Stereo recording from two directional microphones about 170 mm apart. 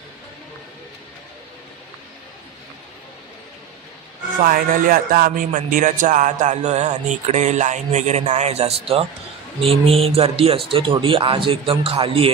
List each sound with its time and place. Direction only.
4.4 s speech: 55° right (ahead or behind); by 12.3 s 35° right (ahead or behind)